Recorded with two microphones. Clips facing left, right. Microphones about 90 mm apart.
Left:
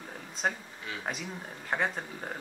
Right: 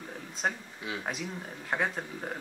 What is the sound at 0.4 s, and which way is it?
Speech, centre (ahead or behind).